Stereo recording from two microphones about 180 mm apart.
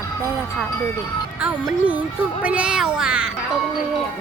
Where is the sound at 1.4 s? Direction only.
5° right (ahead or behind).